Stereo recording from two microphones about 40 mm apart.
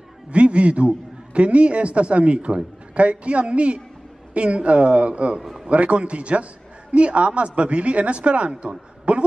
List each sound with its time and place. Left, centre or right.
0.3 s a man's voice: right